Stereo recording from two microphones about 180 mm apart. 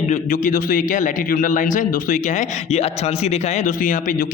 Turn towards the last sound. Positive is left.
turn(degrees=50)  # may be behind; listen again after turning